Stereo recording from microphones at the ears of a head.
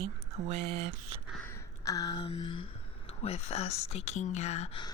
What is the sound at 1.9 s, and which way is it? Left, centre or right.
Speech, left.